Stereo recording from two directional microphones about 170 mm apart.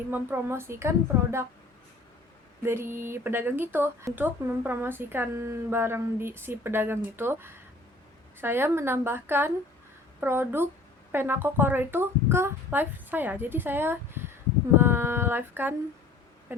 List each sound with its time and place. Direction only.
0.1 s speech: 15° right (ahead or behind)
2.6 s speech: 15° right (ahead or behind)